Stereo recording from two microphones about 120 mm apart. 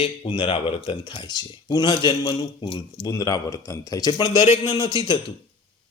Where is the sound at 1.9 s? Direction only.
50° left (ahead or behind).